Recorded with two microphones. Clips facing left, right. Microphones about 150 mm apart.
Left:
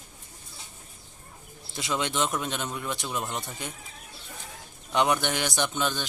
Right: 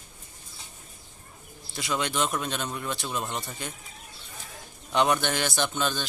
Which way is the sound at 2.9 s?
15° left (ahead or behind).